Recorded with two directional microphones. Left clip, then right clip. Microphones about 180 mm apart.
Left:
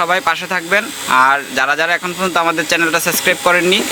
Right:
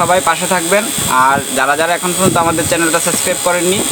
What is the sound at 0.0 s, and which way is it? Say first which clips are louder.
Speech: right 3 dB; 10° left (ahead or behind).